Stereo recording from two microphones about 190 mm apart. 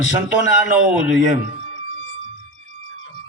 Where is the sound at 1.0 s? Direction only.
90° left.